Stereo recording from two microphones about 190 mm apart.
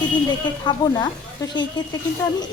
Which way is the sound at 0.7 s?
25° left (ahead or behind).